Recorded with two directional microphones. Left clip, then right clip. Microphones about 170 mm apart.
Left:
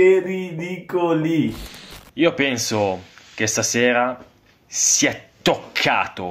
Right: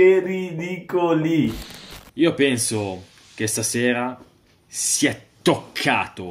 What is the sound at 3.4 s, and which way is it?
Speech, 15° right (ahead or behind).